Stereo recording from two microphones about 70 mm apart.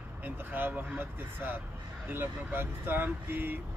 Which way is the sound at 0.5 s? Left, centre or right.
Right.